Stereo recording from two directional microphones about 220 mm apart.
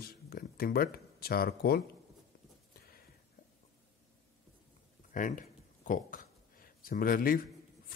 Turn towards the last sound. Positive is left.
turn(degrees=40)  # may be behind; listen again after turning